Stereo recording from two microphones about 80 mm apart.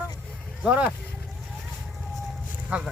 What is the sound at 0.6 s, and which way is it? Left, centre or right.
Speech, centre.